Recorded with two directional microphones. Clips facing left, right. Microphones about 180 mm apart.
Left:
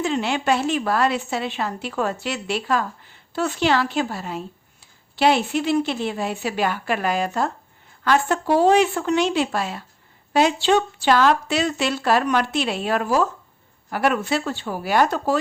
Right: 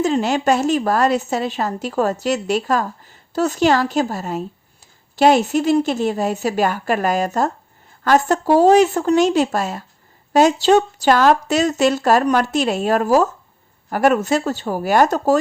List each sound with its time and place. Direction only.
0.0 s a woman's voice: 40° right (ahead or behind)